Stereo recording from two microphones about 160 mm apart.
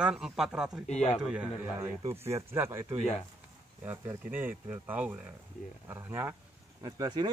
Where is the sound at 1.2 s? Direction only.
5° right (ahead or behind).